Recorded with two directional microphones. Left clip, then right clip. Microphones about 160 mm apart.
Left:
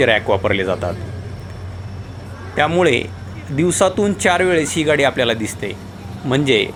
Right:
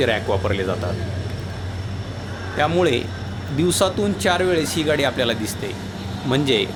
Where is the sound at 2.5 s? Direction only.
5° left (ahead or behind).